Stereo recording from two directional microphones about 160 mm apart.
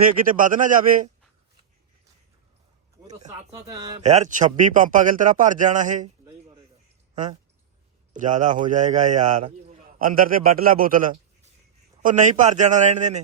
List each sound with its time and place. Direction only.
0.0 s a man's voice: 60° right (ahead or behind)
3.5 s speech: 20° right (ahead or behind)
4.0 s speech: 50° right (ahead or behind)
8.1 s a man's voice: 50° right (ahead or behind)